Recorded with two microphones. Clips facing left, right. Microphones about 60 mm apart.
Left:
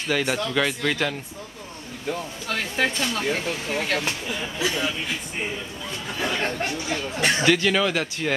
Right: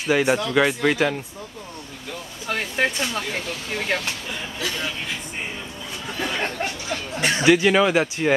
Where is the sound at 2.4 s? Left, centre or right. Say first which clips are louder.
Right 2 dB; centre.